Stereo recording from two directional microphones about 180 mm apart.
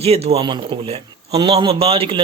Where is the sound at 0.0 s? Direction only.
35° right (ahead or behind).